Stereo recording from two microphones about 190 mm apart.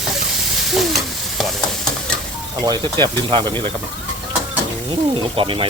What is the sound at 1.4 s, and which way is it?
Stir, centre (ahead or behind).